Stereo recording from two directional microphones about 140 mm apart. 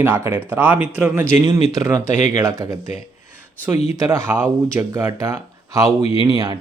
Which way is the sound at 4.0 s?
20° right (ahead or behind).